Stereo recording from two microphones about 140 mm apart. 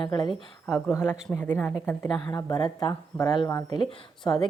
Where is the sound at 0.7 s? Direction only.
20° left (ahead or behind).